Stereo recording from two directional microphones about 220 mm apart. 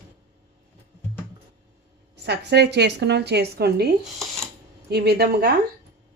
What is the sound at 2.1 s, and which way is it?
A woman's voice, 50° right (ahead or behind).